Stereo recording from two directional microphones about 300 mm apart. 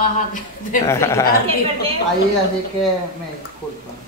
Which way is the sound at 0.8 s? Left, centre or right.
Centre.